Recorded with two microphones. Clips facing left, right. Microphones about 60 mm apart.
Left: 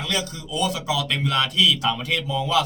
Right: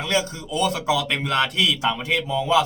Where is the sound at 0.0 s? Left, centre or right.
Right.